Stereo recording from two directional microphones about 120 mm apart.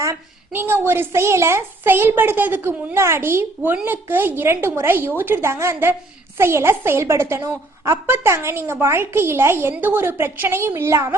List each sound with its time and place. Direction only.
0.0 s a woman's voice: 20° right (ahead or behind)